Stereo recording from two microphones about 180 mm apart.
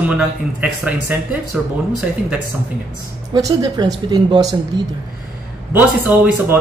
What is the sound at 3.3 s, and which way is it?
A woman's voice, 25° right (ahead or behind).